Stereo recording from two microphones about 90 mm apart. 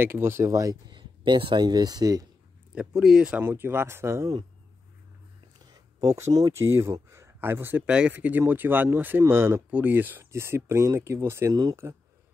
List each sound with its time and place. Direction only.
0.0 s speech: 25° right (ahead or behind)
0.9 s speech: 60° right (ahead or behind)
2.7 s speech: 10° right (ahead or behind)
3.4 s speech: 25° right (ahead or behind)
5.7 s a sound: 40° right (ahead or behind)
6.5 s speech: 30° right (ahead or behind)
7.8 s speech: 10° right (ahead or behind); by 9.6 s 30° right (ahead or behind)
9.7 s speech: 20° right (ahead or behind)